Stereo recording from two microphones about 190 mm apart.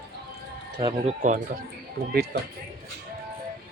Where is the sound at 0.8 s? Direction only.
25° right (ahead or behind).